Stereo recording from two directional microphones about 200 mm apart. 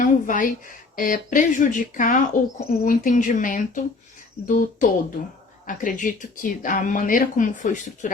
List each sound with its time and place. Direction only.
0.0 s speech: 40° left (ahead or behind)